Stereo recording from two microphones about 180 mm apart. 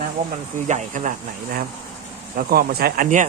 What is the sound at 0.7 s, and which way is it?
Speech, 45° right (ahead or behind).